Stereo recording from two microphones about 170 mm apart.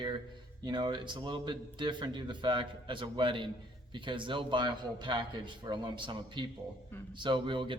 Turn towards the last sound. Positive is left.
turn(degrees=-30)  # may be behind; listen again after turning